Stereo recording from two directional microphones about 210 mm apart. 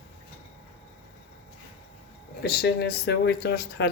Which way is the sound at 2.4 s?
50° left (ahead or behind).